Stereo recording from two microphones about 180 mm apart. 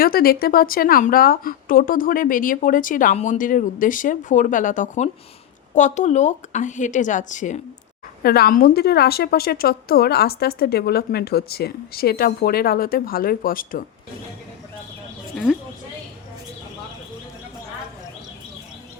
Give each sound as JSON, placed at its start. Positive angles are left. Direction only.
{"t": 0.0, "sound": "speech", "side_deg": 55}
{"t": 8.2, "sound": "a woman's voice", "side_deg": 60}
{"t": 15.5, "sound": "a woman's voice", "side_deg": -5}